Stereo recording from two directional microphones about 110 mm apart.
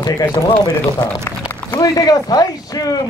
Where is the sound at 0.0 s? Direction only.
40° left (ahead or behind).